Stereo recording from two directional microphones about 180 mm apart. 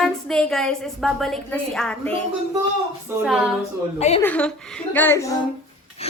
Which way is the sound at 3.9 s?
35° left (ahead or behind).